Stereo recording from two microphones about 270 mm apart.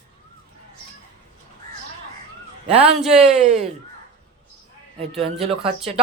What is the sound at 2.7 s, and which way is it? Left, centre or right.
Speech, right.